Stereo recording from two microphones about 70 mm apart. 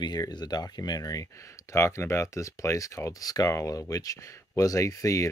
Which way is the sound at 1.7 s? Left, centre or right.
Left.